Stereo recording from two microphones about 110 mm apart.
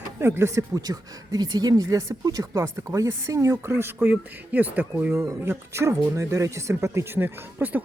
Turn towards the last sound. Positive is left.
turn(degrees=-15)  # may be behind; listen again after turning